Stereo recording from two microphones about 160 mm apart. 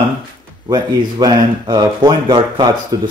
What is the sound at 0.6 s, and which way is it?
Speech, 25° right (ahead or behind).